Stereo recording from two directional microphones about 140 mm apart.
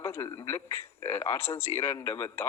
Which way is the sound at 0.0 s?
20° left (ahead or behind).